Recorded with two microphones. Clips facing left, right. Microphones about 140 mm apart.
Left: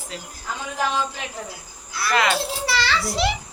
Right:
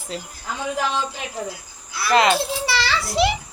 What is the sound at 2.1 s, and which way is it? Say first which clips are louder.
Speech: right 4 dB; 25° right (ahead or behind).